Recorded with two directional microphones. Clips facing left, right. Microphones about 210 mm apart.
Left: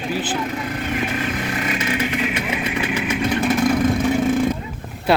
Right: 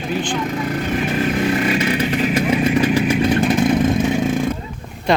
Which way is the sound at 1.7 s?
35° right (ahead or behind).